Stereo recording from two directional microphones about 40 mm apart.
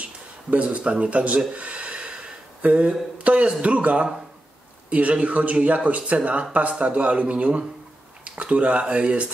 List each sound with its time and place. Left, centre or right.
0.0 s a sound: right
1.0 s speech: right
1.5 s snort: right
2.6 s speech: right